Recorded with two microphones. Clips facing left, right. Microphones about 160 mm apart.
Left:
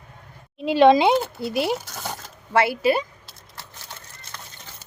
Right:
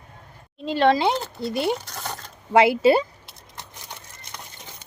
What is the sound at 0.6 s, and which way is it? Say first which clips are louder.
Speech: left 4 dB; 10° left (ahead or behind).